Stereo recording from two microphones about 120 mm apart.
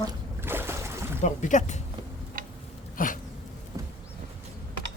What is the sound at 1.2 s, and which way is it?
Speech, 90° left.